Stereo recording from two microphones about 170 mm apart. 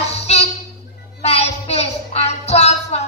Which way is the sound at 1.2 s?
40° left (ahead or behind).